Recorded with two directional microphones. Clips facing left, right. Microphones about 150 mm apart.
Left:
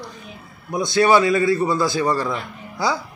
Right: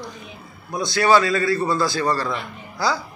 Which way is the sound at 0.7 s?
20° left (ahead or behind).